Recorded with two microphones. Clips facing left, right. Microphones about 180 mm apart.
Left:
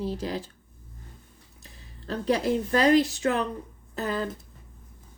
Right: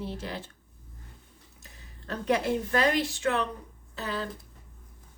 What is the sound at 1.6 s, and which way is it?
Speech, 35° left (ahead or behind).